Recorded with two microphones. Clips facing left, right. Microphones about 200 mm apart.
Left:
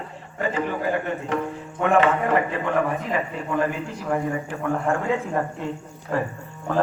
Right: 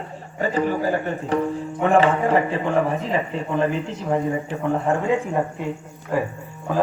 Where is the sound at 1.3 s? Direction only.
35° right (ahead or behind); by 5.7 s 15° right (ahead or behind).